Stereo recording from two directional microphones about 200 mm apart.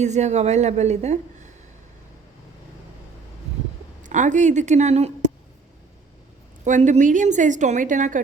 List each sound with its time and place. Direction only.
0.0 s a woman's voice: 35° right (ahead or behind)
4.0 s a woman's voice: 40° right (ahead or behind)
6.7 s a woman's voice: 35° right (ahead or behind)